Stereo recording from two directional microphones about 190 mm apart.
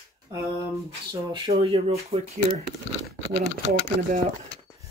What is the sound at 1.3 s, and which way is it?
Speech, 25° right (ahead or behind).